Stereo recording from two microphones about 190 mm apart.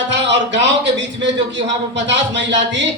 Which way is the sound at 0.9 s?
70° right (ahead or behind).